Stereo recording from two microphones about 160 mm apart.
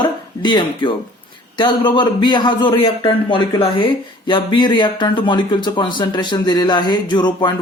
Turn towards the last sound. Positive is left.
turn(degrees=25)  # may be behind; listen again after turning